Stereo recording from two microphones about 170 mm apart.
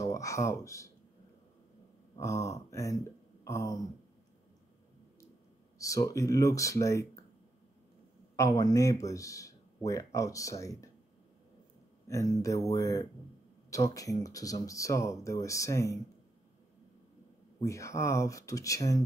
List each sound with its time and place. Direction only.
0.0 s speech: 20° left (ahead or behind)
2.1 s speech: 20° left (ahead or behind)
5.8 s speech: 20° left (ahead or behind)
8.4 s speech: 20° left (ahead or behind)
12.1 s speech: 20° left (ahead or behind)
17.6 s speech: 20° left (ahead or behind)